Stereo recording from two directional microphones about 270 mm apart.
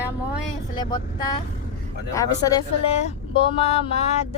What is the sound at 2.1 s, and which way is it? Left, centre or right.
Speech, centre.